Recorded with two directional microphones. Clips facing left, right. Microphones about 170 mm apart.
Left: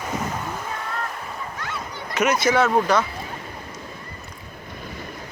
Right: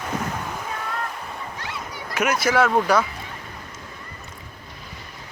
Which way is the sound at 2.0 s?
5° right (ahead or behind).